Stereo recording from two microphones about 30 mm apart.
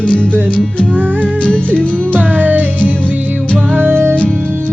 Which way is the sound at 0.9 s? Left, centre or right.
Right.